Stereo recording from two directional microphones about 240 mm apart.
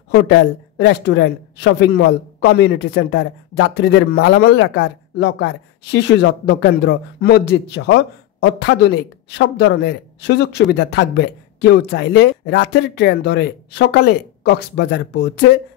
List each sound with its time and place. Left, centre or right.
0.1 s a woman's voice: left